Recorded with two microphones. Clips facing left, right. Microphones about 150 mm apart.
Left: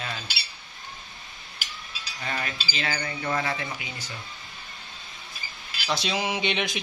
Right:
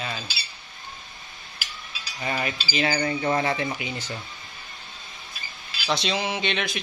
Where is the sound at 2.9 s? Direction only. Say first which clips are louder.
Right 4 dB; 25° right (ahead or behind).